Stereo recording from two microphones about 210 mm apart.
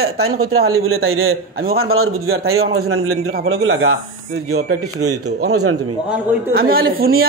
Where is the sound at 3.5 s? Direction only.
75° right (ahead or behind).